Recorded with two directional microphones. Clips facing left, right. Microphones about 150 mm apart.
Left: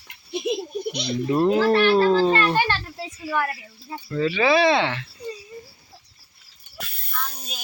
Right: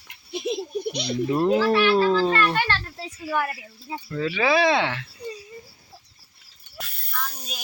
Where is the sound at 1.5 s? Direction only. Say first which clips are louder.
Left 2 dB; 50° left (ahead or behind).